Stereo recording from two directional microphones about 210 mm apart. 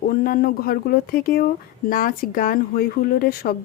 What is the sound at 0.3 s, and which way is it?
Speech, 45° left (ahead or behind).